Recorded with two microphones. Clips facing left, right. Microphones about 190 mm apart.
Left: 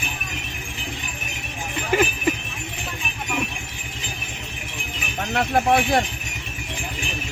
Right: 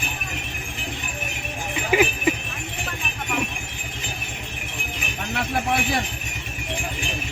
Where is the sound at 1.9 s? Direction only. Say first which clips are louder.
Right 1 dB; 5° right (ahead or behind).